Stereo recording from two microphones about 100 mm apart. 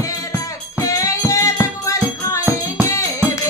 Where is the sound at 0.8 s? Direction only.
35° left (ahead or behind).